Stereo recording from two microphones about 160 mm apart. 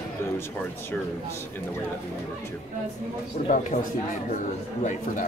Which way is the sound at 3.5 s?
55° left (ahead or behind).